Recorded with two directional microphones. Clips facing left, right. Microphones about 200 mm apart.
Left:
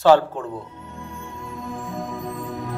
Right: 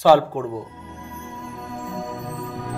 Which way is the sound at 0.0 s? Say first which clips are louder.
Even; 10° right (ahead or behind).